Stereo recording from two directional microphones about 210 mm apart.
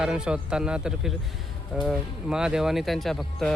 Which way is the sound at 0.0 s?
5° right (ahead or behind).